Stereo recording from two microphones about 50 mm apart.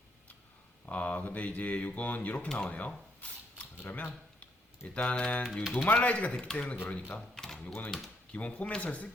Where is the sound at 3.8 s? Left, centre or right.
Left.